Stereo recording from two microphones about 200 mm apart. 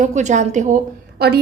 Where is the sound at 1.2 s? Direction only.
55° right (ahead or behind).